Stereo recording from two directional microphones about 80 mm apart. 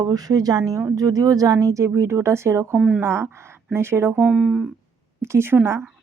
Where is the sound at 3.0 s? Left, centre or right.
Right.